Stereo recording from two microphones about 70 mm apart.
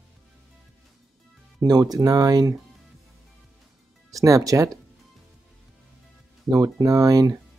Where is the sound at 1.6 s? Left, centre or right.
Right.